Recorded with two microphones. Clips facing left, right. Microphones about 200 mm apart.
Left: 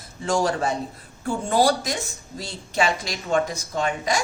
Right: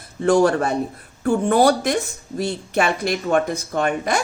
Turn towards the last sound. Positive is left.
turn(degrees=-60)  # may be behind; listen again after turning